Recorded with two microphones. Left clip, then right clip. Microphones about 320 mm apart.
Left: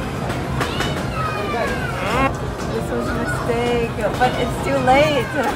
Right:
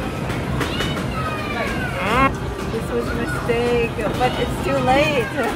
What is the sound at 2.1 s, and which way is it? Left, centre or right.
Music, centre.